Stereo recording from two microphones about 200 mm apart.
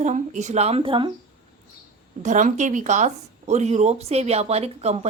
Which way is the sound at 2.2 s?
40° right (ahead or behind).